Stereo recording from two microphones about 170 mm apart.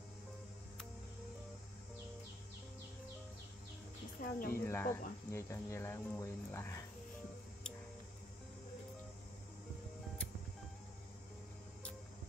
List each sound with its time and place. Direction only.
4.2 s speech: 55° left (ahead or behind)
4.6 s speech: 15° left (ahead or behind)